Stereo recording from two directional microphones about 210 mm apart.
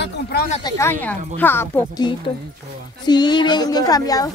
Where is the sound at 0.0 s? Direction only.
50° left (ahead or behind).